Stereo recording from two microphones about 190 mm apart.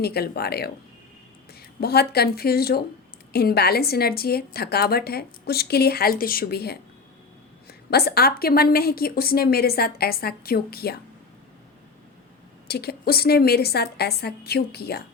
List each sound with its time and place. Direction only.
0.0 s a woman's voice: 55° left (ahead or behind)
1.8 s a woman's voice: 55° left (ahead or behind)
12.6 s a woman's voice: 60° left (ahead or behind)